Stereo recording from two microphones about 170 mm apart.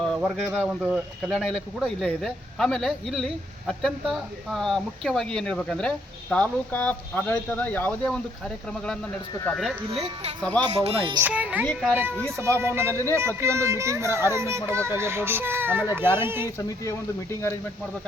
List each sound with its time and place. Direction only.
0.0 s speech: 5° left (ahead or behind)
9.4 s speech: 5° left (ahead or behind)
9.9 s speech: 35° right (ahead or behind)
10.4 s speech: 5° left (ahead or behind)
10.8 s speech: 30° right (ahead or behind)
11.2 s speech: 10° right (ahead or behind)
11.6 s speech: 5° left (ahead or behind)
12.4 s speech: 15° right (ahead or behind)